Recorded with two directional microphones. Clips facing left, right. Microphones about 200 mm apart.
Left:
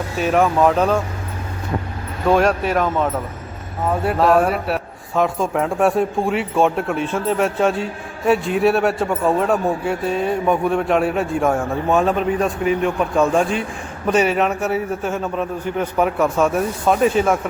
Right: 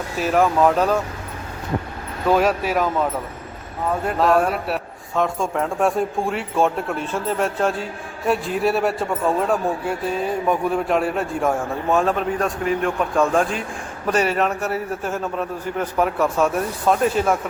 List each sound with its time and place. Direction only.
0.2 s a man's voice: centre (ahead or behind)
2.2 s a man's voice: centre (ahead or behind)